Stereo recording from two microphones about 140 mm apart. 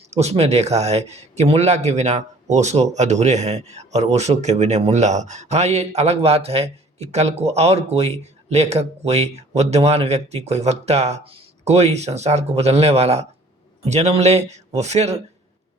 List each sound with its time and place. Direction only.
0.1 s speech: 50° right (ahead or behind)